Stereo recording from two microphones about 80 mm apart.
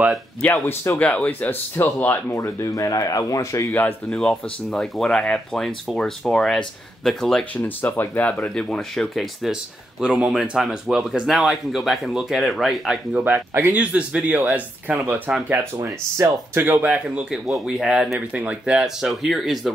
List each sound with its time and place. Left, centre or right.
0.4 s speech: left
2.3 s speech: left
4.1 s speech: centre
7.5 s speech: left
8.3 s speech: centre
9.1 s speech: centre
13.2 s speech: right
15.8 s speech: right
16.5 s speech: right
16.9 s speech: centre
17.5 s speech: centre
18.3 s speech: centre